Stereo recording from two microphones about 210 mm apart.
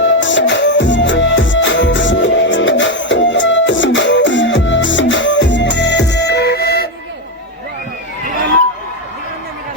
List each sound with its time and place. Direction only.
0.0 s music: 60° left (ahead or behind)